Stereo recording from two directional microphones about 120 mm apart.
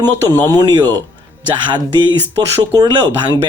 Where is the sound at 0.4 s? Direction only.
35° right (ahead or behind).